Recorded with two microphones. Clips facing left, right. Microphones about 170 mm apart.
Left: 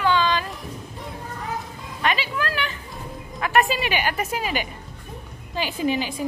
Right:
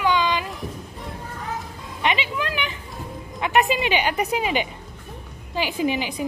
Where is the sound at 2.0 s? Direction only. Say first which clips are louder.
Even; 20° right (ahead or behind).